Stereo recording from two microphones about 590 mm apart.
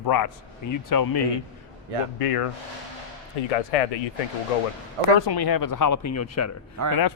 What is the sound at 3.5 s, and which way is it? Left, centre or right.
Speech, left.